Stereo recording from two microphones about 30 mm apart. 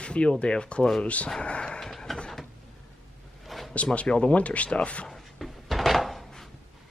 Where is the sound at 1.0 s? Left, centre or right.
Left.